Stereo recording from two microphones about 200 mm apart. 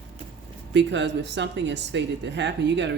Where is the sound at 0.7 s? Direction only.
60° right (ahead or behind).